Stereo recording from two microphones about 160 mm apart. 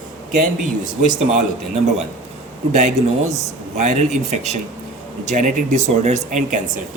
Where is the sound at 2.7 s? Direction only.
50° right (ahead or behind).